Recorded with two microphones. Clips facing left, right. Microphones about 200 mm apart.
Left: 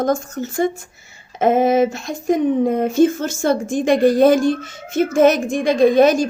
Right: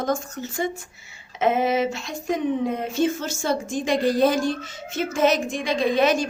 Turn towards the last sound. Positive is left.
turn(degrees=45)  # may be behind; listen again after turning